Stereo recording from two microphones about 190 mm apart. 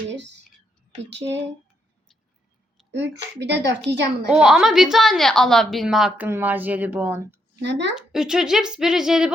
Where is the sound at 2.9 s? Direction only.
65° right (ahead or behind).